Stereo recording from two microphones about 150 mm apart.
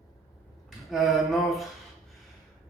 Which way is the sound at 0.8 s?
Centre (ahead or behind).